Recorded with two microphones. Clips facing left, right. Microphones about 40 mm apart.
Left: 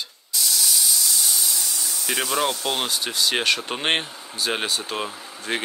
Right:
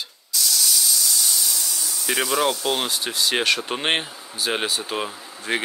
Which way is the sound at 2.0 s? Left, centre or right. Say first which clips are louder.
Right 2 dB; centre.